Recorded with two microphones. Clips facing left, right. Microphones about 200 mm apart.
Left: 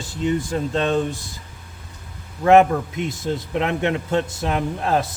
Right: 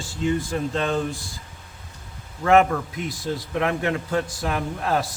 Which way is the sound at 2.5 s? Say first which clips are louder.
Left 4 dB; 20° left (ahead or behind).